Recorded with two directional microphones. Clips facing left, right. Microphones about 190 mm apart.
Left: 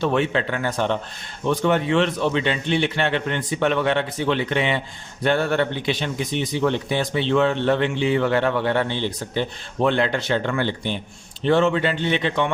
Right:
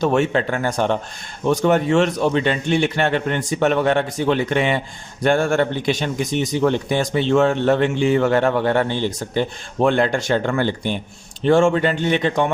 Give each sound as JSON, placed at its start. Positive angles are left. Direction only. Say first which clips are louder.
{"t": 0.0, "sound": "speech", "louder": "right 3 dB", "side_deg": -45}